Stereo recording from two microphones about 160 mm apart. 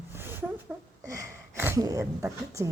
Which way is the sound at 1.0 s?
15° right (ahead or behind).